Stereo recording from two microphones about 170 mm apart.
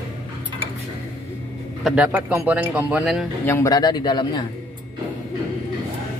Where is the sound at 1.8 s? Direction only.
5° right (ahead or behind).